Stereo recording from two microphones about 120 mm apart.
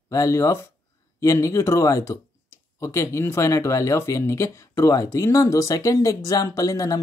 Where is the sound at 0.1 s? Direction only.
25° left (ahead or behind).